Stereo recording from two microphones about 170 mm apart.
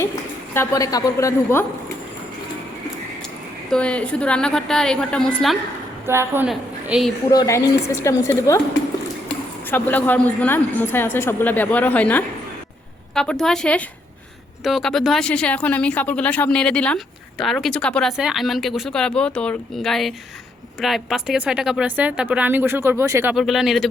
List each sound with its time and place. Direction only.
0.5 s a woman's voice: 15° left (ahead or behind)
3.7 s speech: 5° left (ahead or behind)
6.1 s speech: 15° right (ahead or behind)
6.5 s a woman's voice: 5° right (ahead or behind)
7.3 s a woman's voice: 20° left (ahead or behind)
9.6 s a woman's voice: 10° left (ahead or behind); by 23.3 s 15° right (ahead or behind)
23.3 s speech: centre (ahead or behind)